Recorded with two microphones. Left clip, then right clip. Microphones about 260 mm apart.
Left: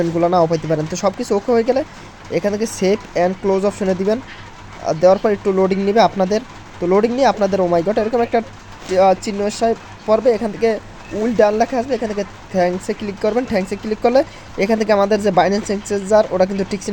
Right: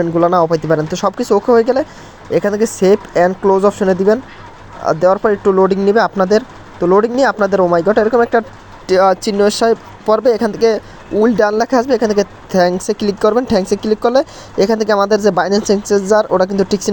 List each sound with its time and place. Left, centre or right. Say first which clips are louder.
0.0 s speech: right 3 dB; centre